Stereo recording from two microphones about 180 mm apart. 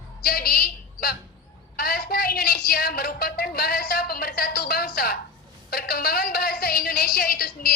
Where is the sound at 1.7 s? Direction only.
60° left (ahead or behind).